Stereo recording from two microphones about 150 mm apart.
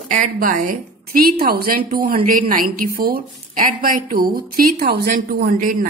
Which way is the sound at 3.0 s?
90° right.